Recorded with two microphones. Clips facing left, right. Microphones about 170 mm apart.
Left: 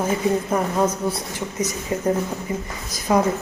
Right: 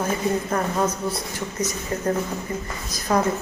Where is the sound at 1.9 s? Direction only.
15° left (ahead or behind).